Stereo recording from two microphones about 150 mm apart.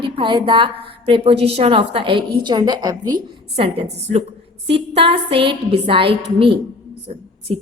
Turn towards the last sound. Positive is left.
turn(degrees=-40)  # may be behind; listen again after turning